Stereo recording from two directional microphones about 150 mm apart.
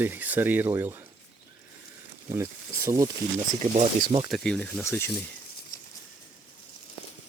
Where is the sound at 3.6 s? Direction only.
50° right (ahead or behind).